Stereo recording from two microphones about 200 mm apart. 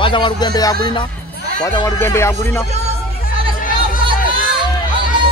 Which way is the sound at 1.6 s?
15° left (ahead or behind).